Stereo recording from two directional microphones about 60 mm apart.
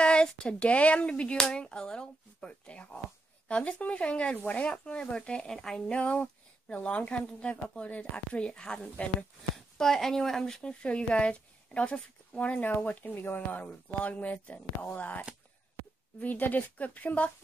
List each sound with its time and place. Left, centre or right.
0.0 s speech: centre
5.9 s speech: left
9.8 s speech: centre; by 17.3 s left